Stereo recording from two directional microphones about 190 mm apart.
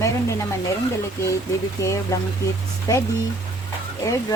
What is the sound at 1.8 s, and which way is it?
Speech, 15° left (ahead or behind).